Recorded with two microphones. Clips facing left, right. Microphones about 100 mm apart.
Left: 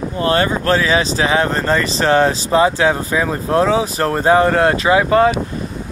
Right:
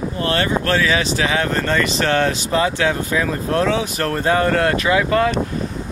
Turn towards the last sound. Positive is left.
turn(degrees=30)  # may be behind; listen again after turning